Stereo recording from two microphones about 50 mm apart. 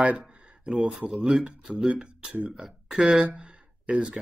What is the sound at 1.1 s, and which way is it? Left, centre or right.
Speech, centre.